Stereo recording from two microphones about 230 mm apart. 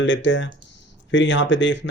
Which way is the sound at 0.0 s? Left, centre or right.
Left.